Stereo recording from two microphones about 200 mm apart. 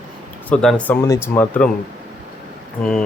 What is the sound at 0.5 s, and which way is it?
Speech, 5° left (ahead or behind).